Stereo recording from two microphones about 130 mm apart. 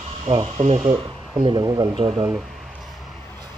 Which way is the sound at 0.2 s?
50° right (ahead or behind).